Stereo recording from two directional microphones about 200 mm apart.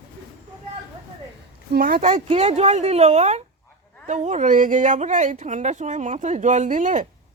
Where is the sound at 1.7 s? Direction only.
50° right (ahead or behind).